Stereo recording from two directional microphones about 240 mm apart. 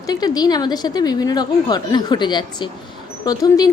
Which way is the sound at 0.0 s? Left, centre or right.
Centre.